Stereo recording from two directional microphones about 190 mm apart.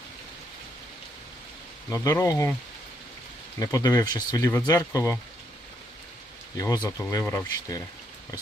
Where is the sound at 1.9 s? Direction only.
20° left (ahead or behind).